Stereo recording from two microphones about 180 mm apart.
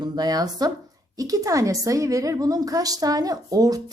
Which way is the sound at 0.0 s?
20° right (ahead or behind).